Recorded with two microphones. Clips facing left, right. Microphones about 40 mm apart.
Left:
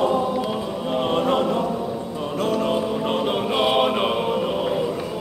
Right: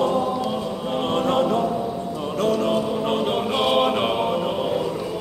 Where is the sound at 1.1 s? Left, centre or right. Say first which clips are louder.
Right 1 dB; centre.